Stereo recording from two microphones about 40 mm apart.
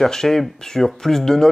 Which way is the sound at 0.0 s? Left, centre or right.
Centre.